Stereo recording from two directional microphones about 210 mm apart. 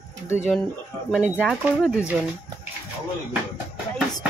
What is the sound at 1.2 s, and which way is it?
Speech, 5° right (ahead or behind).